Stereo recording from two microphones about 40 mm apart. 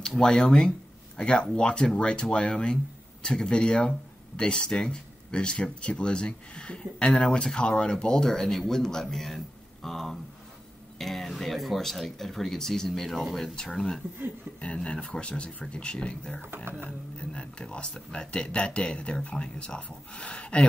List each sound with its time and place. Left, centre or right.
0.2 s speech: centre
7.4 s speech: centre
13.7 s speech: centre
14.6 s speech: left
16.4 s speech: right
17.2 s speech: left